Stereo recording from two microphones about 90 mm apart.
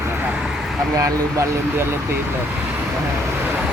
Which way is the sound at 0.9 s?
35° right (ahead or behind).